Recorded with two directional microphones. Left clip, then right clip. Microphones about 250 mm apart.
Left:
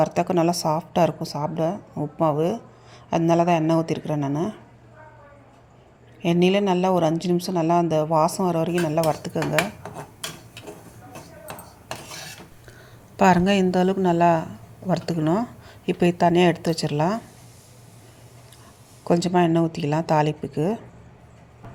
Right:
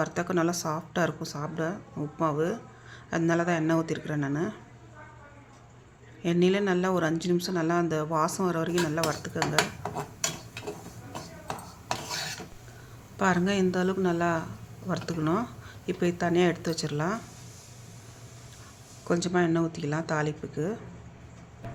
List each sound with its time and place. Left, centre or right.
0.0 s a woman's voice: centre
6.2 s a woman's voice: centre
11.4 s a sound: centre
13.1 s speech: left
19.0 s speech: centre